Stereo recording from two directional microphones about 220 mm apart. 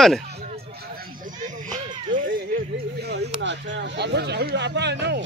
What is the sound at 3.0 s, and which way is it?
Speech, 50° right (ahead or behind).